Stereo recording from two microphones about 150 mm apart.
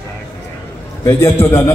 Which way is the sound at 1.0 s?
20° left (ahead or behind).